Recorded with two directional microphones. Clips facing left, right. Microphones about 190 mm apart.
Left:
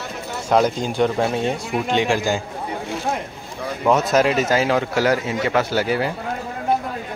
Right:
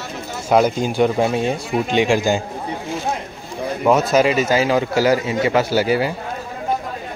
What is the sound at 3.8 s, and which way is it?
Speech, 5° right (ahead or behind).